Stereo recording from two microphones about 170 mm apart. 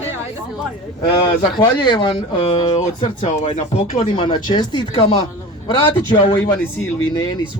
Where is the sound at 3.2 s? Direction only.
40° left (ahead or behind).